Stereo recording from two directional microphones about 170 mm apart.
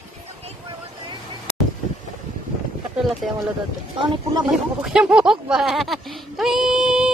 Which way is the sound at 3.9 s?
25° right (ahead or behind).